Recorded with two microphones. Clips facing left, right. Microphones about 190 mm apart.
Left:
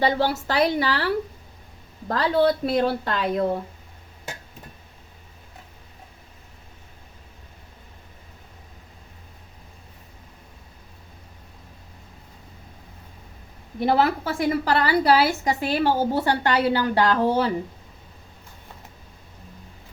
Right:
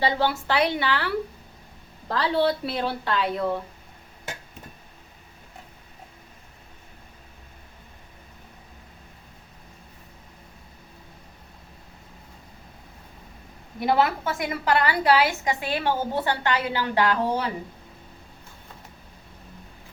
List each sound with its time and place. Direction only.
0.0 s a woman's voice: 40° left (ahead or behind)
13.8 s a woman's voice: 35° left (ahead or behind)